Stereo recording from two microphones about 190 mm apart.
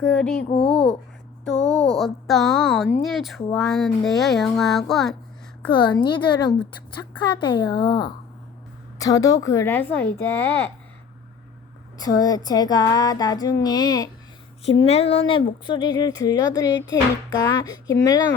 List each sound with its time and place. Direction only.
0.0 s speech: 5° left (ahead or behind)
0.4 s speech: 30° left (ahead or behind)
1.6 s a sound: 20° right (ahead or behind)
2.0 s speech: centre (ahead or behind)
5.7 s a woman's voice: 25° left (ahead or behind)
11.9 s speech: 20° left (ahead or behind)
14.6 s speech: 30° left (ahead or behind); by 18.3 s 15° left (ahead or behind)